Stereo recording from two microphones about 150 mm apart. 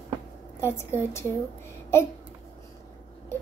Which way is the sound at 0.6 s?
15° left (ahead or behind).